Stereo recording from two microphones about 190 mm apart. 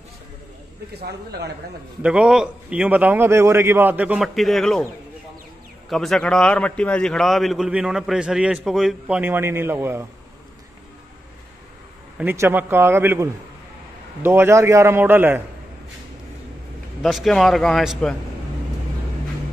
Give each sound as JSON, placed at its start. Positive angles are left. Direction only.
{"t": 0.9, "sound": "speech", "side_deg": -60}
{"t": 2.0, "sound": "a man's voice", "side_deg": -5}
{"t": 5.9, "sound": "a man's voice", "side_deg": 0}
{"t": 12.2, "sound": "a man's voice", "side_deg": -10}
{"t": 17.0, "sound": "a man's voice", "side_deg": 0}